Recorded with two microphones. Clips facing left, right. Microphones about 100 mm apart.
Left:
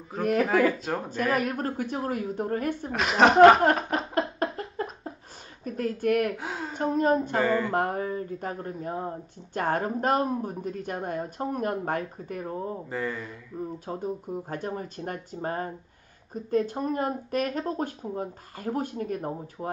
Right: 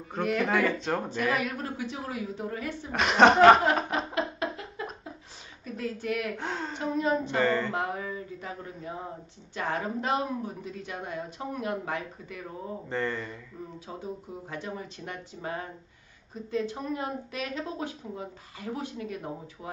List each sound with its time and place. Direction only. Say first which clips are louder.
0.4 s a woman's voice: left 4 dB; 5° left (ahead or behind)
1.3 s speech: left 4 dB; 45° left (ahead or behind)
2.9 s a woman's voice: right 1 dB; centre (ahead or behind)
4.4 s a sound: left 4 dB; 45° left (ahead or behind)
5.6 s speech: left 5 dB; 50° left (ahead or behind)
6.3 s a woman's voice: even; 5° left (ahead or behind)
6.8 s speech: left 5 dB; 45° left (ahead or behind)
7.3 s speech: left 2 dB; 5° left (ahead or behind)
7.7 s speech: left 5 dB; 50° left (ahead or behind)
12.9 s a woman's voice: right 4 dB; 5° left (ahead or behind)
13.9 s speech: left 5 dB; 45° left (ahead or behind)